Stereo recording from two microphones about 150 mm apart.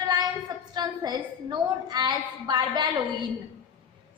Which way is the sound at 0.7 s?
25° right (ahead or behind).